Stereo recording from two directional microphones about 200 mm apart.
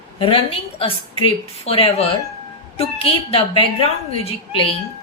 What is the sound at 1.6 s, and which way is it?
A woman's voice, 30° left (ahead or behind).